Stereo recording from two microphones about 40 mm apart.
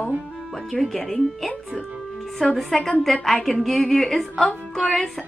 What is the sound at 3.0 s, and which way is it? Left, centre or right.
A woman's voice, centre.